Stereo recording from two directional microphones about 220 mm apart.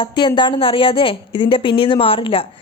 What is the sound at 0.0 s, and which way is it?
A woman's voice, 20° left (ahead or behind).